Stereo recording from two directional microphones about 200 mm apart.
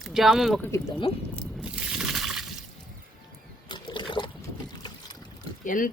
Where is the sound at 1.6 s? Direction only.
5° right (ahead or behind).